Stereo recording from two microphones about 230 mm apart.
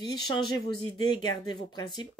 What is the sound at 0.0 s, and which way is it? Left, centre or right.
Speech, centre.